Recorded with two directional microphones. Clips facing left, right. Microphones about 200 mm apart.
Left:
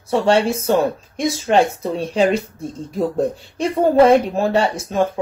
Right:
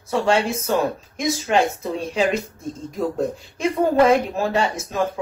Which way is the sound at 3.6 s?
30° left (ahead or behind).